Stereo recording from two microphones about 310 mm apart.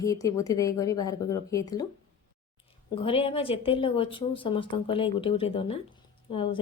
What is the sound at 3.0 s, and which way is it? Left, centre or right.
A woman's voice, centre.